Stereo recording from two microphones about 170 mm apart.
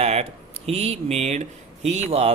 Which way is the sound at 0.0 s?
40° right (ahead or behind).